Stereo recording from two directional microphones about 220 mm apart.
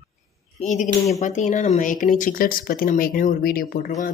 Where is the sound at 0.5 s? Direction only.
35° left (ahead or behind).